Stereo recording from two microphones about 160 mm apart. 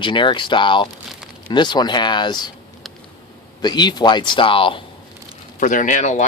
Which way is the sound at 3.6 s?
25° left (ahead or behind).